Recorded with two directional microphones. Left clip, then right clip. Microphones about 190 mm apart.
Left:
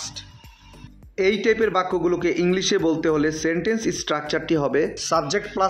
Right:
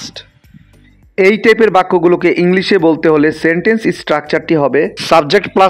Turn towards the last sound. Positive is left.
turn(degrees=-45)  # may be behind; listen again after turning